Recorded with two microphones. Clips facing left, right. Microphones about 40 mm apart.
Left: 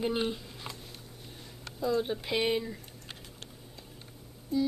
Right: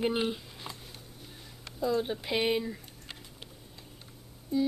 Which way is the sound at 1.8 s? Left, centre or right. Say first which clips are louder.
Even; centre.